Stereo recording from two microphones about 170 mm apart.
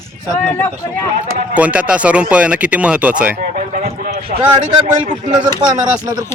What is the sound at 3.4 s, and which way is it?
Speech, 50° right (ahead or behind).